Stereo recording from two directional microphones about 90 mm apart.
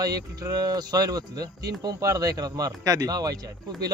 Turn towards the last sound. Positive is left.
turn(degrees=-45)  # may be behind; listen again after turning